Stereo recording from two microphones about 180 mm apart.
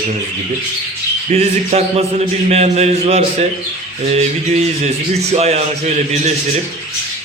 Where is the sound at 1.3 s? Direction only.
35° right (ahead or behind).